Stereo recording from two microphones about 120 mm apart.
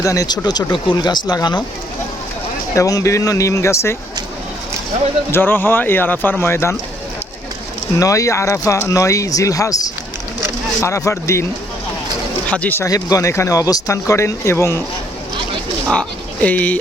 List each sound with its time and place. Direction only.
0.0 s speech: 30° left (ahead or behind)
2.7 s speech: 25° left (ahead or behind)
5.3 s speech: 15° left (ahead or behind)
7.9 s speech: 30° left (ahead or behind)
12.5 s speech: 10° left (ahead or behind)
12.8 s speech: 30° left (ahead or behind)
15.9 s speech: 10° left (ahead or behind)